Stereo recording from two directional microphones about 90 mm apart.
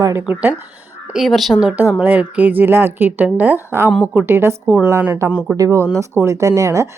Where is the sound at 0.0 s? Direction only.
30° right (ahead or behind).